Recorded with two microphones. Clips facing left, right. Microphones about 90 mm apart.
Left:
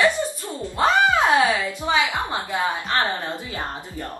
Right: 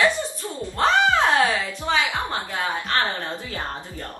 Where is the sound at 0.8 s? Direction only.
5° left (ahead or behind).